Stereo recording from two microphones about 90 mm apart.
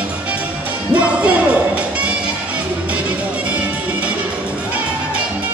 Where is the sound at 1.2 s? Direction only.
15° right (ahead or behind).